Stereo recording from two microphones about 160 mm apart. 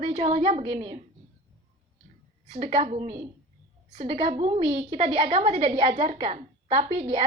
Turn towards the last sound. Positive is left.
turn(degrees=-40)  # may be behind; listen again after turning